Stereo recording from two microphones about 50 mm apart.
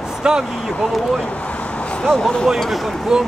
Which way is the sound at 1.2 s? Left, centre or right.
Left.